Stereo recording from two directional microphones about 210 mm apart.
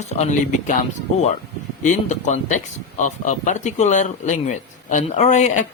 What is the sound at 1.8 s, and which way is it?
Speech, 35° left (ahead or behind).